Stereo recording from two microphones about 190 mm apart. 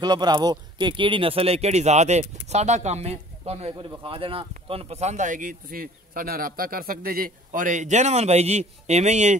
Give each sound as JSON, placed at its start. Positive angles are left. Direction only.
{"t": 0.0, "sound": "speech", "side_deg": -20}